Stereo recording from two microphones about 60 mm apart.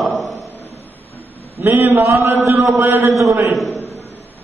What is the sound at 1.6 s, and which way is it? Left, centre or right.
A man's voice, right.